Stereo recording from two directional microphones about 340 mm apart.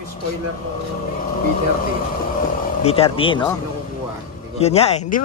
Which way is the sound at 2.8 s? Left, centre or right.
Centre.